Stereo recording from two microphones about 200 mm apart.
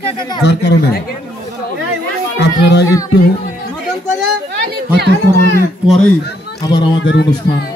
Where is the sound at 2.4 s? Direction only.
55° left (ahead or behind).